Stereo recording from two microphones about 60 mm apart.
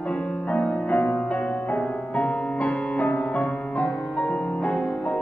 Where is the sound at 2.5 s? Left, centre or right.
Centre.